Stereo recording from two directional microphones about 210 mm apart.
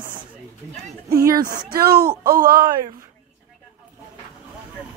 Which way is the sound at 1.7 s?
45° right (ahead or behind).